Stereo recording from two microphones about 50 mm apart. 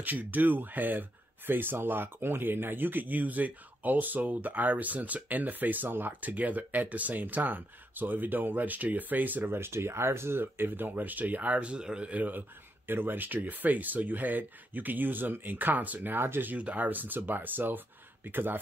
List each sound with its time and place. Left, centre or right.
0.0 s speech: right
16.5 s speech: right